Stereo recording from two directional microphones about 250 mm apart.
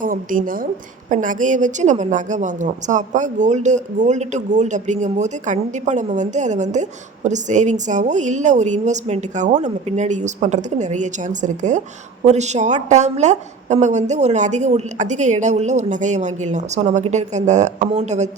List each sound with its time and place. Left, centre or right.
0.0 s a woman's voice: right